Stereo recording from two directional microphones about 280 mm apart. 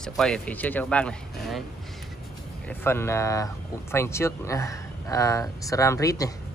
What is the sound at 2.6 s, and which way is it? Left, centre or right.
Speech, centre.